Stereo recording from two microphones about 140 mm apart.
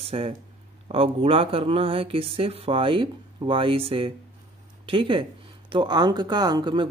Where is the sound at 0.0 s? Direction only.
45° right (ahead or behind).